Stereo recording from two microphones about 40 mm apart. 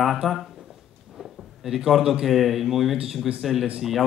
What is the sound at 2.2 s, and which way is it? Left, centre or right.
A man's voice, centre.